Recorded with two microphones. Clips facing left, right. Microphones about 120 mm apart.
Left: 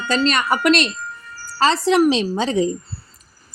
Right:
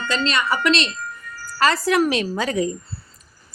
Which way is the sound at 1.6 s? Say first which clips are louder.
Left 3 dB; 25° left (ahead or behind).